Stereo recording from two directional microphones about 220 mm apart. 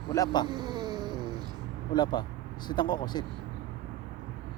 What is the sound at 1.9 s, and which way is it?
Speech, 20° left (ahead or behind).